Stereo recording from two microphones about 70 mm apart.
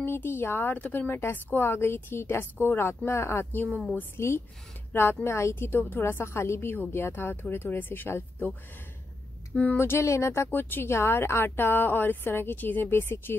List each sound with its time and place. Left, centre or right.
0.0 s speech: left
9.8 s speech: left